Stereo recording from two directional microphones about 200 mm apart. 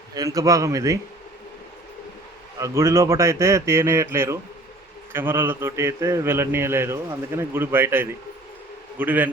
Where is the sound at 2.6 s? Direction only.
15° right (ahead or behind).